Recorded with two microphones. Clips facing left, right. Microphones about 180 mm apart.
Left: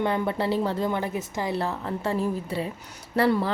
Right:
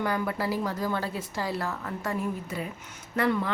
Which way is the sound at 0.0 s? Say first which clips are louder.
Left 3 dB; 25° left (ahead or behind).